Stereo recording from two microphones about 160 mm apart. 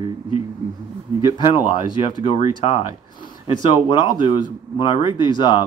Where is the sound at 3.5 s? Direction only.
30° left (ahead or behind).